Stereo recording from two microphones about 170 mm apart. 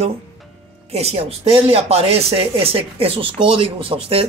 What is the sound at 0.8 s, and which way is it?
Speech, 40° right (ahead or behind).